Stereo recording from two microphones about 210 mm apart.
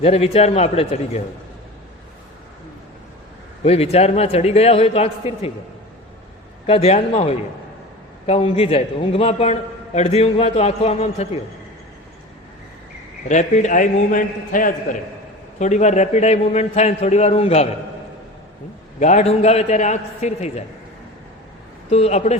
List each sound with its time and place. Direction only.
0.0 s a man's voice: 30° left (ahead or behind)
3.6 s a man's voice: 30° left (ahead or behind)
6.7 s a man's voice: 30° left (ahead or behind)
13.2 s a man's voice: 35° left (ahead or behind)
18.9 s a man's voice: 35° left (ahead or behind)
21.8 s a man's voice: 30° left (ahead or behind)